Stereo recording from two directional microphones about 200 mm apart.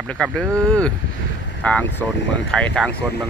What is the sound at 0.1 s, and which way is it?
Speech, 5° left (ahead or behind).